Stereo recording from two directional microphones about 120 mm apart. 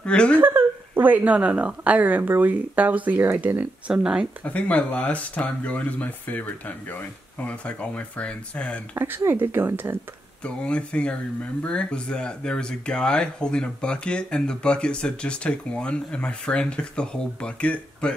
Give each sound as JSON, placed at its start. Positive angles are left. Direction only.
{"t": 0.0, "sound": "speech", "side_deg": 10}
{"t": 0.4, "sound": "speech", "side_deg": -15}
{"t": 4.5, "sound": "speech", "side_deg": 10}
{"t": 8.9, "sound": "speech", "side_deg": -20}
{"t": 10.4, "sound": "speech", "side_deg": 10}